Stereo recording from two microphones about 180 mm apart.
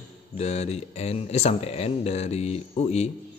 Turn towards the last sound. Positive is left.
turn(degrees=35)  # may be behind; listen again after turning